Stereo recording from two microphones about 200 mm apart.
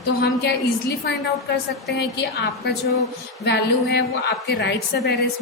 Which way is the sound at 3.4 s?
60° left (ahead or behind).